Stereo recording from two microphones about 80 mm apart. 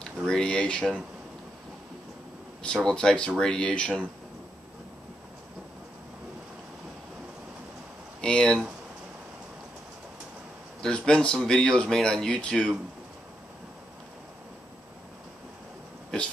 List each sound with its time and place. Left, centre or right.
0.3 s speech: centre
2.6 s speech: centre
8.2 s speech: centre
10.8 s speech: centre